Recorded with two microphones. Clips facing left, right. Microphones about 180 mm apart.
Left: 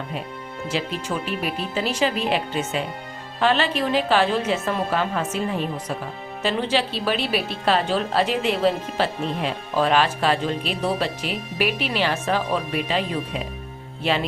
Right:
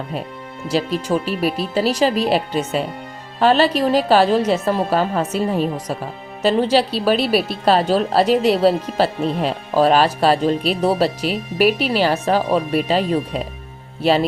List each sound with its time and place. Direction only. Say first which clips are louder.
0.7 s speech: right 8 dB; 40° right (ahead or behind)